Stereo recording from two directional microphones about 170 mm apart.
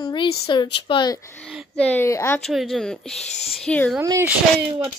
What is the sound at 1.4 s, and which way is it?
Speech, centre (ahead or behind).